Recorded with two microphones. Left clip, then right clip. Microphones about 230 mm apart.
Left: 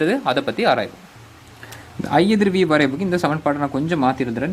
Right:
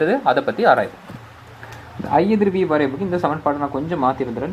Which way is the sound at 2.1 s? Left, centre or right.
Left.